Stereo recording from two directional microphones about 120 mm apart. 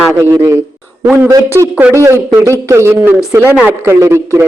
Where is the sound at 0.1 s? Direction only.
25° right (ahead or behind).